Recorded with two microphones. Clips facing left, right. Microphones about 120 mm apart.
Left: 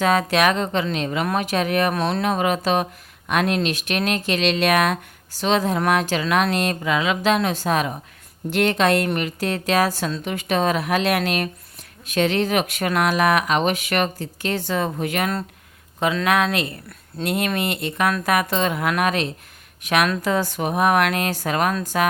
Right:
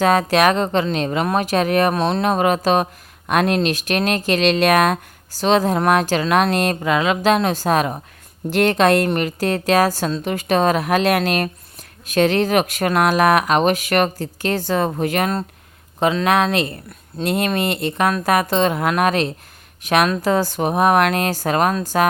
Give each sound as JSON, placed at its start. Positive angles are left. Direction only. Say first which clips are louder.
{"t": 0.0, "sound": "a woman's voice", "louder": "right 3 dB", "side_deg": -40}
{"t": 2.0, "sound": "a woman's voice", "louder": "right 3 dB", "side_deg": -30}